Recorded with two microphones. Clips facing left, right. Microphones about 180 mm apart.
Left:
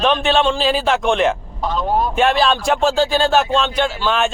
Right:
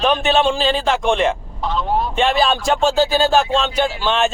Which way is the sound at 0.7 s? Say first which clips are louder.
Left 1 dB; 5° left (ahead or behind).